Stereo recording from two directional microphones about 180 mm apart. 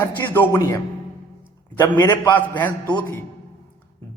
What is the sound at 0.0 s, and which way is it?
Speech, 10° left (ahead or behind).